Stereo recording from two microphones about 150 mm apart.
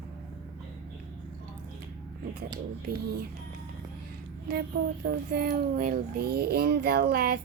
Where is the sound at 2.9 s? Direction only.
90° right.